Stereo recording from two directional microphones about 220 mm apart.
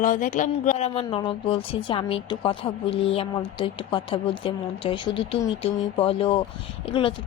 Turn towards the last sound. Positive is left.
turn(degrees=25)  # may be behind; listen again after turning